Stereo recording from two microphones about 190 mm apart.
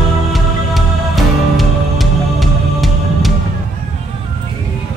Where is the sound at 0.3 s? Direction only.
Centre (ahead or behind).